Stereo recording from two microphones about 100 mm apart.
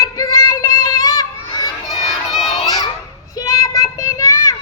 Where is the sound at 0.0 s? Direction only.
35° left (ahead or behind).